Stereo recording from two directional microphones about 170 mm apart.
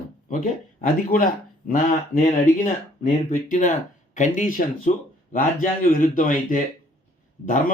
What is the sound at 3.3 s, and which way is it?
A man's voice, 50° left (ahead or behind).